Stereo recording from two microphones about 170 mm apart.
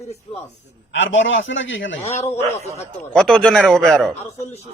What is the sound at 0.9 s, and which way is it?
A man's voice, 90° left.